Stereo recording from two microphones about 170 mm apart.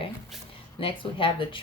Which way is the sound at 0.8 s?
30° left (ahead or behind).